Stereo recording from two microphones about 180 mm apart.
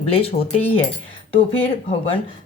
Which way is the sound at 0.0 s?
35° left (ahead or behind).